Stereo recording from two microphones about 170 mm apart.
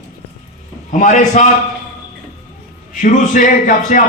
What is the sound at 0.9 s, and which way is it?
Speech, 50° left (ahead or behind).